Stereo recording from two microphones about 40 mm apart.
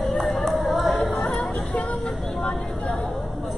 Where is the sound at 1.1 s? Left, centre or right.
Centre.